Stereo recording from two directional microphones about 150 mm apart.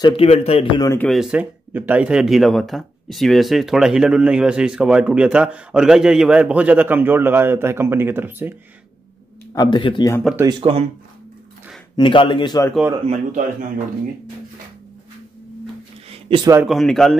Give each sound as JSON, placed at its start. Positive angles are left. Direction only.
{"t": 0.0, "sound": "a man's voice", "side_deg": 40}
{"t": 0.9, "sound": "speech", "side_deg": 0}
{"t": 9.5, "sound": "a man's voice", "side_deg": 30}
{"t": 10.3, "sound": "speech", "side_deg": 0}
{"t": 10.6, "sound": "speech", "side_deg": -40}
{"t": 12.0, "sound": "a man's voice", "side_deg": 35}
{"t": 13.0, "sound": "speech", "side_deg": -50}
{"t": 16.1, "sound": "a sound", "side_deg": -35}
{"t": 16.6, "sound": "speech", "side_deg": 0}